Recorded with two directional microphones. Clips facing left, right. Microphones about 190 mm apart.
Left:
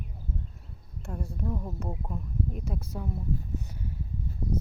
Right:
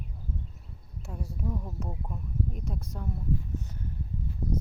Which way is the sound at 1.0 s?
5° right (ahead or behind).